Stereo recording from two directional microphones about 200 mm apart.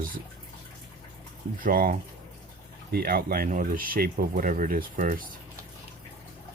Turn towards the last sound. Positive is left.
turn(degrees=-45)  # may be behind; listen again after turning